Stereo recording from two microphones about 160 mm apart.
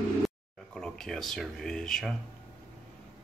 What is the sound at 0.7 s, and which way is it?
Speech, 5° left (ahead or behind).